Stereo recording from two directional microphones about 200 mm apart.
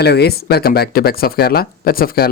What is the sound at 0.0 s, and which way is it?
Speech, 55° left (ahead or behind).